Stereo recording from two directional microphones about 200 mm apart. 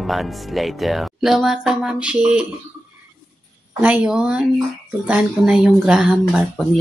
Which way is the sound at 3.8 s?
10° right (ahead or behind).